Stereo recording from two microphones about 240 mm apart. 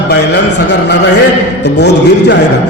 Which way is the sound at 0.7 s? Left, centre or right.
Left.